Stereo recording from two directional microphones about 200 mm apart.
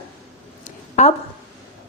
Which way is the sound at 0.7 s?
35° left (ahead or behind).